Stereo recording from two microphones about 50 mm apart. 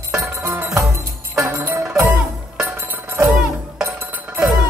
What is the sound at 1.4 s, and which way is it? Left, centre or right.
Music, right.